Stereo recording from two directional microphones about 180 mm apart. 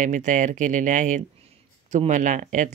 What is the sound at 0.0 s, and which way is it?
Speech, 45° right (ahead or behind).